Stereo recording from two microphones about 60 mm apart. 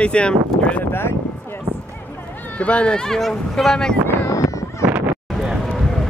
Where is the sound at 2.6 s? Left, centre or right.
Centre.